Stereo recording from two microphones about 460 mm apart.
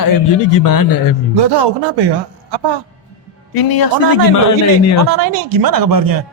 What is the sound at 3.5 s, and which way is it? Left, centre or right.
Speech, left.